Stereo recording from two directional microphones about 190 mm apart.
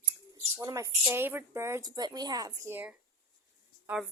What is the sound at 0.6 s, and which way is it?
A woman's voice, 15° right (ahead or behind).